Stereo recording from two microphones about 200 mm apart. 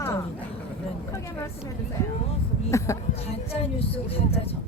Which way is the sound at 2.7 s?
15° left (ahead or behind).